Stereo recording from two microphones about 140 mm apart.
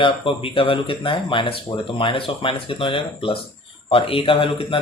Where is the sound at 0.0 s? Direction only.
40° left (ahead or behind).